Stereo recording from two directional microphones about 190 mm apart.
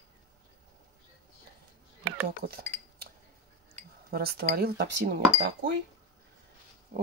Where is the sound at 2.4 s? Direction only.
55° right (ahead or behind).